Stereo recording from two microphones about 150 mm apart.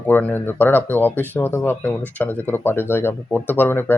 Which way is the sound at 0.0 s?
10° left (ahead or behind).